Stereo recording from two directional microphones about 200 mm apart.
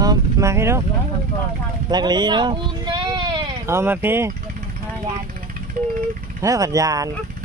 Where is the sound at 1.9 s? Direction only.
20° right (ahead or behind).